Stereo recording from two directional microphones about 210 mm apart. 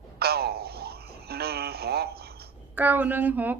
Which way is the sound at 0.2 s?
50° right (ahead or behind).